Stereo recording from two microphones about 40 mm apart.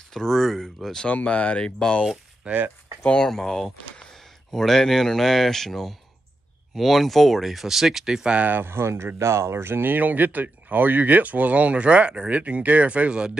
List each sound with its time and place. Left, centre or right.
0.1 s speech: centre
1.0 s speech: left
1.8 s speech: left
2.4 s speech: right
3.3 s speech: centre
8.6 s speech: right
9.9 s speech: right